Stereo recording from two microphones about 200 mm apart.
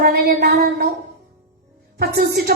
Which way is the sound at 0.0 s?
50° right (ahead or behind).